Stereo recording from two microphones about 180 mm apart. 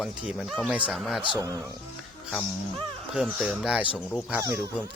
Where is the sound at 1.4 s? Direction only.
20° right (ahead or behind).